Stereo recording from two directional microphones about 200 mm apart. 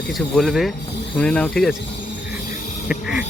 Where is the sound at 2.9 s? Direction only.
5° right (ahead or behind).